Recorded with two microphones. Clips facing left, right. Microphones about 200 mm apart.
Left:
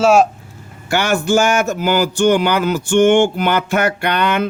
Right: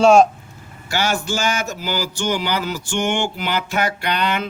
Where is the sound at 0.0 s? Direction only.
5° left (ahead or behind).